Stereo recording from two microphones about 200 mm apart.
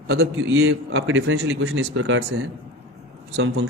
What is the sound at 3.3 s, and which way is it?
Speech, 90° right.